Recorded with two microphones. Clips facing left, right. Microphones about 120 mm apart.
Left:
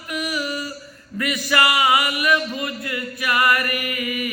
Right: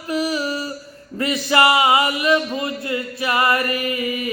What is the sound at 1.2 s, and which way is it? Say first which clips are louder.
Mantra: right 3 dB; 30° right (ahead or behind).